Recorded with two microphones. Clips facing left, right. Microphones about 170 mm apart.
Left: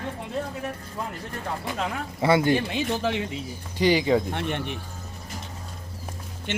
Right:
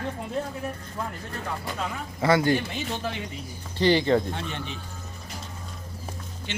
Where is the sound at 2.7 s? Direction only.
90° left.